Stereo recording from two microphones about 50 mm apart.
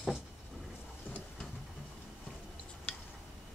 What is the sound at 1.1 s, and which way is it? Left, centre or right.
Vehicle, left.